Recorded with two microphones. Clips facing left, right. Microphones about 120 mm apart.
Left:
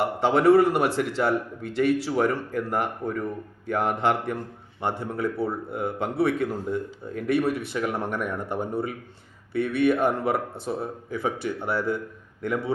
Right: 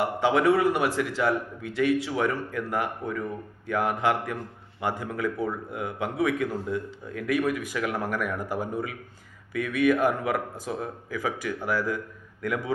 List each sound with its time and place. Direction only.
0.0 s a man's voice: 35° left (ahead or behind)
8.4 s speech: 5° right (ahead or behind)
8.7 s a man's voice: 30° left (ahead or behind)